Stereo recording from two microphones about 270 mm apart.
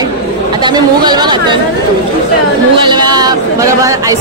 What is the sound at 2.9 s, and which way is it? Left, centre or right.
Speech, centre.